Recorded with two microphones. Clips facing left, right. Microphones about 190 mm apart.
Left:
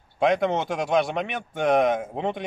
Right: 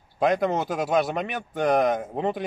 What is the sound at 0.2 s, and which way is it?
Speech, centre (ahead or behind).